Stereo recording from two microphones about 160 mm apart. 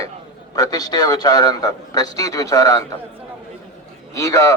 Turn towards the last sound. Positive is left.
turn(degrees=20)  # may be behind; listen again after turning